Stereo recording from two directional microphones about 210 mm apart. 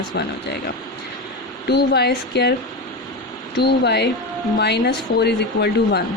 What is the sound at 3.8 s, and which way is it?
A woman's voice, 50° left (ahead or behind).